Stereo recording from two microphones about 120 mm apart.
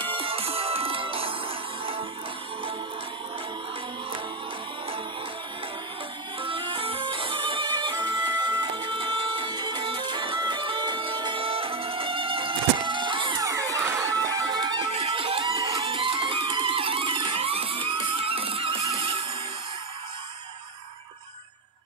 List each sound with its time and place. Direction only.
0.1 s music: 50° right (ahead or behind)
6.4 s music: 45° right (ahead or behind)
13.4 s music: 30° right (ahead or behind)
14.9 s music: 50° right (ahead or behind)
15.9 s music: 50° right (ahead or behind)